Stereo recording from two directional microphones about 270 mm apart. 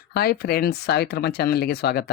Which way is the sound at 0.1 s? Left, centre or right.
Left.